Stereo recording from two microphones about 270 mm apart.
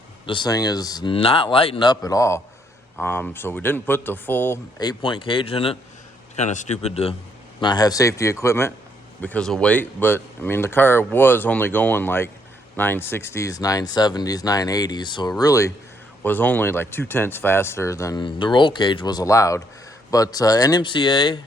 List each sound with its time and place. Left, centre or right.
0.3 s speech: centre